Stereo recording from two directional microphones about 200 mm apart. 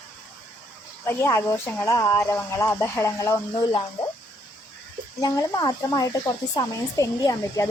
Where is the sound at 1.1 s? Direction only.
10° left (ahead or behind).